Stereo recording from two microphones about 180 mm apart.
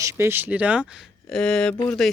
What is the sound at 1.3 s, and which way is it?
Speech, 5° left (ahead or behind).